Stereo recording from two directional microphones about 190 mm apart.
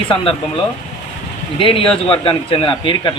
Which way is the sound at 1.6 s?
25° left (ahead or behind).